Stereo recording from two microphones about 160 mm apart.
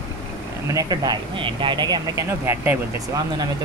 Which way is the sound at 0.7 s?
25° right (ahead or behind).